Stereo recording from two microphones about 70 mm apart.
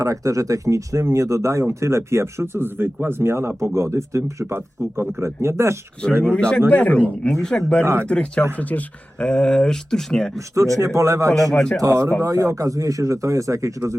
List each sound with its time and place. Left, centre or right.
0.0 s speech: right
6.3 s a man's voice: centre
10.3 s speech: right
11.5 s speech: centre
11.8 s speech: right